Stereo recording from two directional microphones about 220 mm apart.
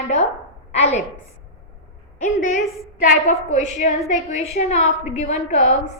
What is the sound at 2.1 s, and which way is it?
A woman's voice, 35° left (ahead or behind).